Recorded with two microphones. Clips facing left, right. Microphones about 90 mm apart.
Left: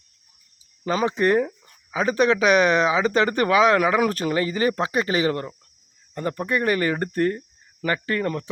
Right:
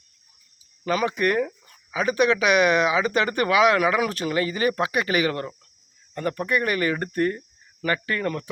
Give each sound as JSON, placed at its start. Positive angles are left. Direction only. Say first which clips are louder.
{"t": 0.9, "sound": "speech", "louder": "left 2 dB", "side_deg": 30}